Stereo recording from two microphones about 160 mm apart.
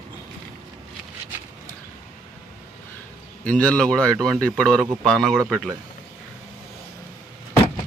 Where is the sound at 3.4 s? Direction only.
5° left (ahead or behind).